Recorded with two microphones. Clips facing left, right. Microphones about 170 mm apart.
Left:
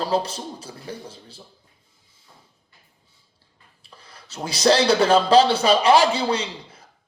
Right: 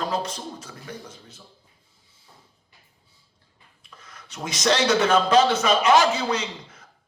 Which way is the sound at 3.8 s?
30° left (ahead or behind).